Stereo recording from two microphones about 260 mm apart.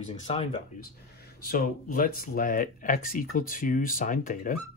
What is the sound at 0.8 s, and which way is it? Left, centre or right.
Speech, left.